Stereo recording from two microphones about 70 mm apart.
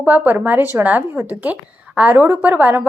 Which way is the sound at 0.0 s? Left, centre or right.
Right.